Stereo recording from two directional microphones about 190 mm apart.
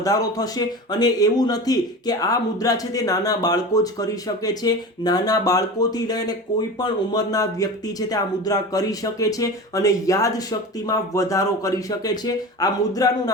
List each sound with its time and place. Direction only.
0.0 s speech: 20° left (ahead or behind)